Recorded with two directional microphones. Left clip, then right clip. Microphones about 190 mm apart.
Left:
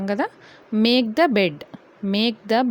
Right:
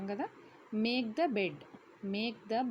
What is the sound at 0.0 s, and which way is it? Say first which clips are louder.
A woman's voice: left 15 dB; 50° left (ahead or behind).